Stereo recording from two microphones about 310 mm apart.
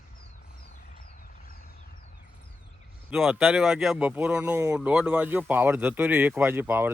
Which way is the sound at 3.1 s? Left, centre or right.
Centre.